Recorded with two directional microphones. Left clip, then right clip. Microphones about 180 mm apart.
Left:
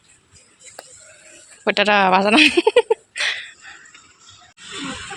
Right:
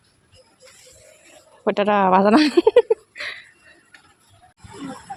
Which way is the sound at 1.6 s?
25° right (ahead or behind).